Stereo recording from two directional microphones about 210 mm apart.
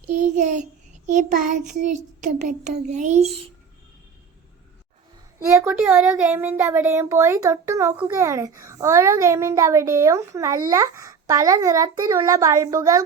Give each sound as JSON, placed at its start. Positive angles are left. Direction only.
{"t": 0.1, "sound": "child singing", "side_deg": -35}
{"t": 5.6, "sound": "speech", "side_deg": -5}